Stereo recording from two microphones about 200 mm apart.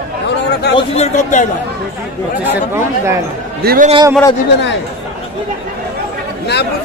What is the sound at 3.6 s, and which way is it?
Speech, 50° right (ahead or behind).